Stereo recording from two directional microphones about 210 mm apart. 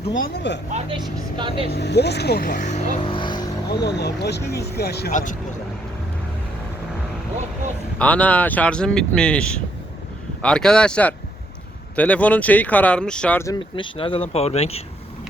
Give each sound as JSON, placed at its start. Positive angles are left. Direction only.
{"t": 0.2, "sound": "speech", "side_deg": 55}
{"t": 0.7, "sound": "speech", "side_deg": -30}
{"t": 1.7, "sound": "speech", "side_deg": 50}
{"t": 3.7, "sound": "speech", "side_deg": 50}
{"t": 5.1, "sound": "speech", "side_deg": 35}
{"t": 7.9, "sound": "speech", "side_deg": 5}